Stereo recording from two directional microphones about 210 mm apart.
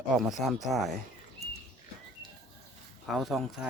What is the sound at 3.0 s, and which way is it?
Speech, centre (ahead or behind).